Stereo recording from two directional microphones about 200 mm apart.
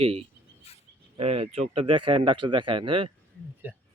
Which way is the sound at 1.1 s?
30° right (ahead or behind).